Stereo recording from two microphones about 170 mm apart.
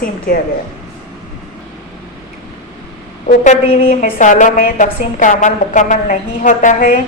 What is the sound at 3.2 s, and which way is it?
A woman's voice, 45° left (ahead or behind).